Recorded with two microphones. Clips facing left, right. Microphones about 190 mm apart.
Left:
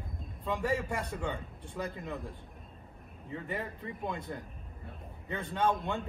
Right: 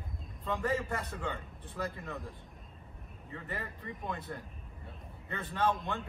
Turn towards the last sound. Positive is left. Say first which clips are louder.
# left 2 dB
turn(degrees=15)  # may be behind; listen again after turning